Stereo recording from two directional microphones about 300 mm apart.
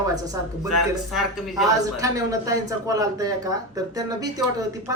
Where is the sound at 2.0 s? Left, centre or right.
Centre.